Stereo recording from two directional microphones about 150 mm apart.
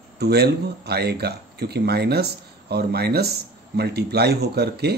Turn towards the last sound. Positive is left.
turn(degrees=-90)